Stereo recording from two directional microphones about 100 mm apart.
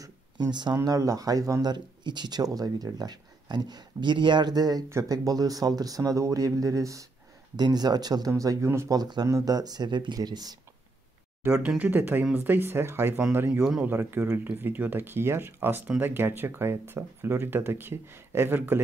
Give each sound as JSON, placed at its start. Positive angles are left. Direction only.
{"t": 0.0, "sound": "a sound", "side_deg": -45}
{"t": 0.7, "sound": "speech", "side_deg": -35}
{"t": 1.7, "sound": "speech", "side_deg": -45}
{"t": 8.3, "sound": "speech", "side_deg": -30}
{"t": 8.9, "sound": "speech", "side_deg": -40}
{"t": 11.6, "sound": "speech", "side_deg": -15}